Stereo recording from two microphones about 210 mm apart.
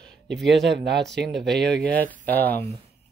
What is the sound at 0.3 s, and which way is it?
Speech, 55° right (ahead or behind).